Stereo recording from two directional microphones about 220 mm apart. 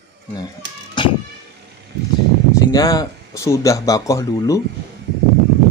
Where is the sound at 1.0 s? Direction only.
20° left (ahead or behind).